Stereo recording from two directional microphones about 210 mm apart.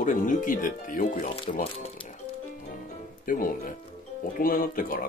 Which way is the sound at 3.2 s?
40° left (ahead or behind).